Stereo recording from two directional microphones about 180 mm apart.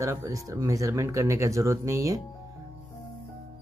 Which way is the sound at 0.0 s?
15° right (ahead or behind).